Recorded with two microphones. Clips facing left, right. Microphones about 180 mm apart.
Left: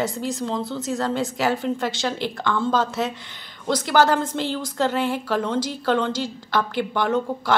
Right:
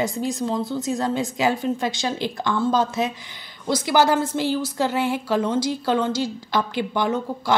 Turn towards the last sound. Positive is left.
turn(degrees=-10)  # may be behind; listen again after turning